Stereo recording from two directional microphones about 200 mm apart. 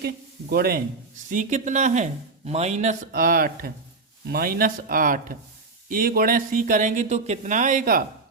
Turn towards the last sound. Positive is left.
turn(degrees=-45)  # may be behind; listen again after turning